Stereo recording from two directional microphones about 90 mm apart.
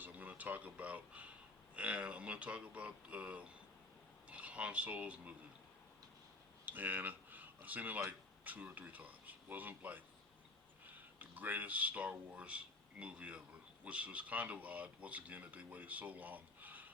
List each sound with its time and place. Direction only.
0.0 s speech: 20° right (ahead or behind)
6.7 s speech: 20° right (ahead or behind)